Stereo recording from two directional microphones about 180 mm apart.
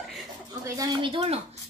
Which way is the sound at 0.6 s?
20° right (ahead or behind).